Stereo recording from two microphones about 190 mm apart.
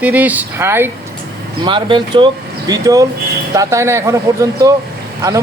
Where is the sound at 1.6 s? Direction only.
25° right (ahead or behind).